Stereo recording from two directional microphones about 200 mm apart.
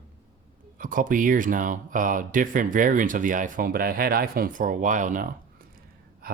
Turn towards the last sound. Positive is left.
turn(degrees=-45)  # may be behind; listen again after turning